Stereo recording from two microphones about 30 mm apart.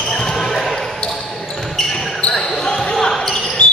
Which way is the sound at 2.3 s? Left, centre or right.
Left.